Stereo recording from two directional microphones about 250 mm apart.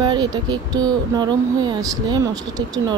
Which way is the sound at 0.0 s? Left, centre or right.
Centre.